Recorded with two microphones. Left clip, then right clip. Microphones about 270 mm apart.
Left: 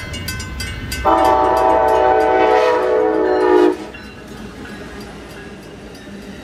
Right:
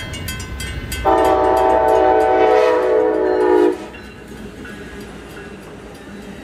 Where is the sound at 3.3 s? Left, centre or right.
Centre.